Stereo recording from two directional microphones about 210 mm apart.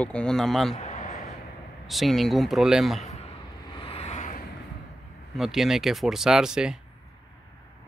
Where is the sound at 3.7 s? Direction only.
25° left (ahead or behind).